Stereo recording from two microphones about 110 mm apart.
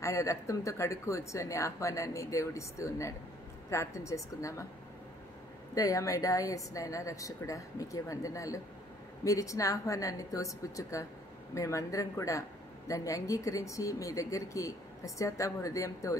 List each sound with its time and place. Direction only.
0.0 s speech: 30° left (ahead or behind)
5.8 s speech: 30° left (ahead or behind)